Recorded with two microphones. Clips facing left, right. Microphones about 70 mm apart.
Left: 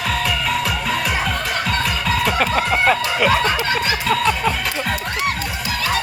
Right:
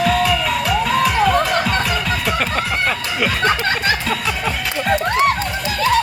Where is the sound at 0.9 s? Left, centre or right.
Centre.